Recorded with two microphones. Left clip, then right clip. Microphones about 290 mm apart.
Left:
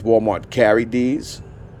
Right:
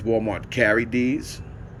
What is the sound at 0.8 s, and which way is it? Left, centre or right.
Speech, left.